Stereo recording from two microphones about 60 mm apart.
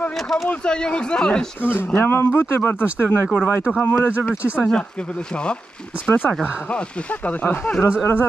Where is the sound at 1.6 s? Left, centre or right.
Left.